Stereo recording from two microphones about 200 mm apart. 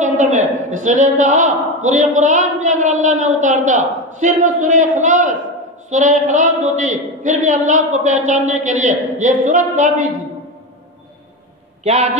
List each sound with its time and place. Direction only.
0.0 s a woman's voice: 40° right (ahead or behind)
11.8 s a woman's voice: 35° right (ahead or behind)